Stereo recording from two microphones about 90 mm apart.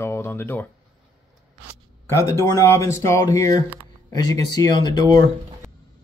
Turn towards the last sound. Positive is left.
turn(degrees=50)  # may be behind; listen again after turning